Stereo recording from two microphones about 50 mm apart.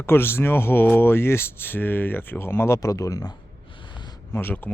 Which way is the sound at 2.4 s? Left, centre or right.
Left.